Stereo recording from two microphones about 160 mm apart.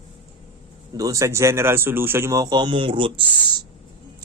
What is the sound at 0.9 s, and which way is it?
Speech, 20° right (ahead or behind).